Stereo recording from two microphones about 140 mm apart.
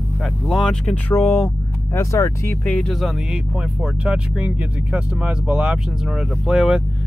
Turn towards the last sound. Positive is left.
turn(degrees=-5)  # may be behind; listen again after turning